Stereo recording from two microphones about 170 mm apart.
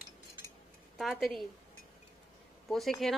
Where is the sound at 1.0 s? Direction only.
Centre (ahead or behind).